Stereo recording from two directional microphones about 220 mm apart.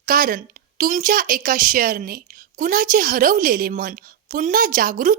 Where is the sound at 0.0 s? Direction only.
40° right (ahead or behind).